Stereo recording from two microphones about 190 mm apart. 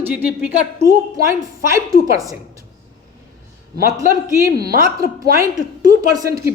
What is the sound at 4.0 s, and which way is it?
A woman's voice, 15° right (ahead or behind).